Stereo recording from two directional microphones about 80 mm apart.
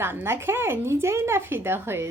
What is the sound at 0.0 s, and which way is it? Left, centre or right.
Speech, right.